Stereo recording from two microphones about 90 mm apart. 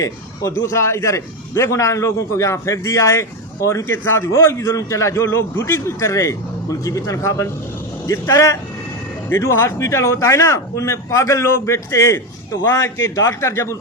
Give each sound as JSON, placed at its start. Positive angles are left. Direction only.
{"t": 0.0, "sound": "a man's voice", "side_deg": 35}